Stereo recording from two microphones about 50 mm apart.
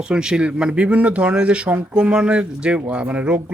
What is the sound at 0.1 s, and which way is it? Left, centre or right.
Speech, centre.